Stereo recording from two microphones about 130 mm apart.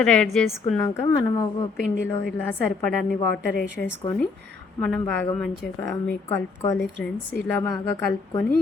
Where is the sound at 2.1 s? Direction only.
15° left (ahead or behind).